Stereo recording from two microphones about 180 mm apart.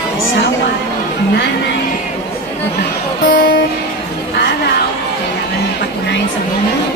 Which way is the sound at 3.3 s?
75° left (ahead or behind).